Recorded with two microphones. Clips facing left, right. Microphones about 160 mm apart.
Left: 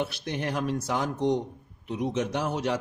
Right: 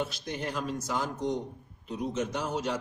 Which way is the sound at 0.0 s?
65° left (ahead or behind).